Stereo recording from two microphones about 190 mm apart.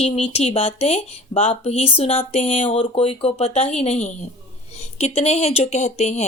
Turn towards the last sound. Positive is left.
turn(degrees=35)  # may be behind; listen again after turning